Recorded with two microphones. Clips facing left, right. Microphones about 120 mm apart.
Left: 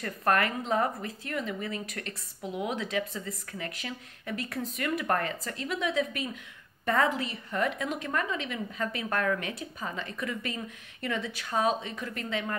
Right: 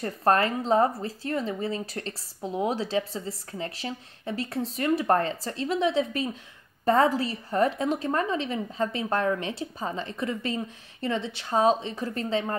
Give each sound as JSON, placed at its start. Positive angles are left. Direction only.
{"t": 0.0, "sound": "speech", "side_deg": -30}